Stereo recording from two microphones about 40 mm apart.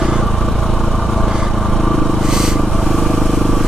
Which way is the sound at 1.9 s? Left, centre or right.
Centre.